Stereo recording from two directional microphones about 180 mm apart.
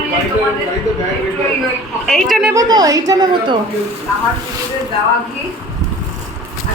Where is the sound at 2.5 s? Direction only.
20° right (ahead or behind).